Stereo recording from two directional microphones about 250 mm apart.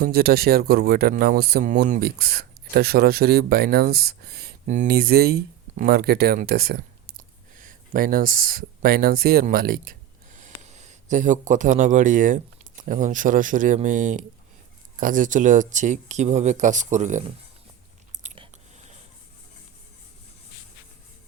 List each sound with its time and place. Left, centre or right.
0.0 s speech: right
18.1 s biting: right